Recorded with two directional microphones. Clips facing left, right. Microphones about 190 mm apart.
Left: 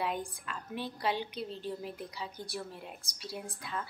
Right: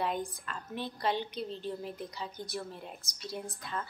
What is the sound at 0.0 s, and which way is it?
A woman's voice, 5° left (ahead or behind).